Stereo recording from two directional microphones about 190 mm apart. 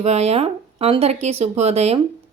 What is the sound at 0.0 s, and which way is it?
Speech, 35° right (ahead or behind).